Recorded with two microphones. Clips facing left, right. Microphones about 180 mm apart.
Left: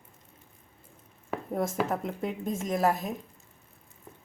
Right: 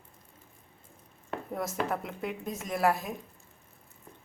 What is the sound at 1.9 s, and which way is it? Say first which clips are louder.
Speech: left 3 dB; 40° left (ahead or behind).